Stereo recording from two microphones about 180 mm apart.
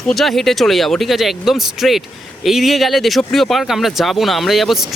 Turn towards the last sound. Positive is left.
turn(degrees=0)  # may be behind; listen again after turning